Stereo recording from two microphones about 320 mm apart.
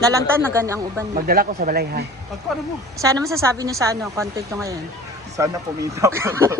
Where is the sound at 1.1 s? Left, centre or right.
Right.